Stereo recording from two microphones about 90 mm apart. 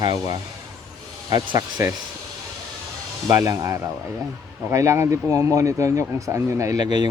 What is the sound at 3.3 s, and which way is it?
Speech, 35° right (ahead or behind).